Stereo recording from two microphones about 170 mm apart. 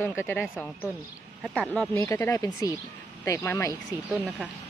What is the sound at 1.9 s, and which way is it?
Speech, 15° left (ahead or behind).